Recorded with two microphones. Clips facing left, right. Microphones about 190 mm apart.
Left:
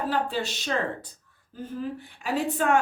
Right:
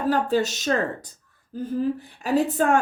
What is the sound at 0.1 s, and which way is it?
A woman's voice, 45° right (ahead or behind).